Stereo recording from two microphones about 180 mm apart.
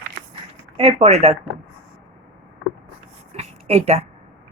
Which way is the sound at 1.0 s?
35° right (ahead or behind).